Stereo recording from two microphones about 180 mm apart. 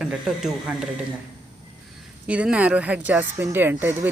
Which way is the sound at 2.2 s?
5° right (ahead or behind).